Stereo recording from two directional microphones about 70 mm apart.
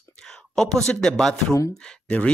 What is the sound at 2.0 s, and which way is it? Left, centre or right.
Speech, centre.